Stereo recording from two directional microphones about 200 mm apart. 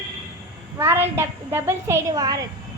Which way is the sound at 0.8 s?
10° right (ahead or behind).